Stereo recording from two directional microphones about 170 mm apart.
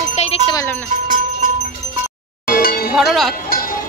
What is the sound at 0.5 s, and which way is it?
Music, 15° left (ahead or behind).